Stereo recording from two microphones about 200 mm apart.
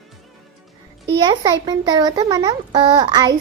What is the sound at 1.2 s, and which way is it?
A child's voice, 20° right (ahead or behind).